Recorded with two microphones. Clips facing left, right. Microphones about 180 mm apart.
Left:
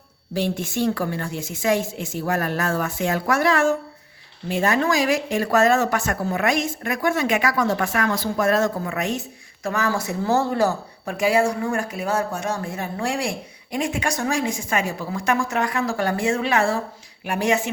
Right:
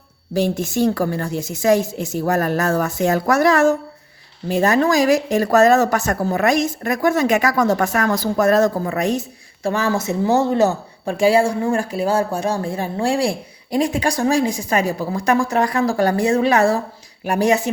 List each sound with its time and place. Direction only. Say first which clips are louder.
0.3 s speech: right 5 dB; 40° right (ahead or behind)